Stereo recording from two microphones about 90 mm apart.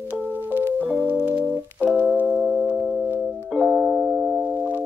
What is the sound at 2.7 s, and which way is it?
Music, 10° left (ahead or behind).